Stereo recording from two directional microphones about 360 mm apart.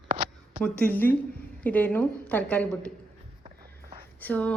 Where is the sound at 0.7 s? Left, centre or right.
Centre.